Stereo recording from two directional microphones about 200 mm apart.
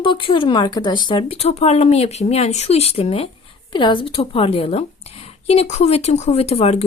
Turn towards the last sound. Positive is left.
turn(degrees=30)  # may be behind; listen again after turning